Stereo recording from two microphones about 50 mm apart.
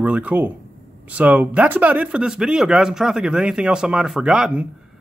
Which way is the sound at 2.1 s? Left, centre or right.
Centre.